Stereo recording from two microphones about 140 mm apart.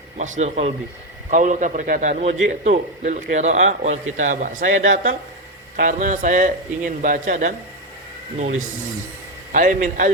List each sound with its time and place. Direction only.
0.2 s a man's voice: 55° right (ahead or behind)
9.5 s a man's voice: 75° right (ahead or behind)